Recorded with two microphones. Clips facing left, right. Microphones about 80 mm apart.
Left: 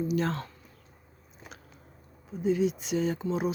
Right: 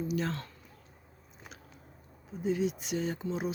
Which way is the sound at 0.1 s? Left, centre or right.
Left.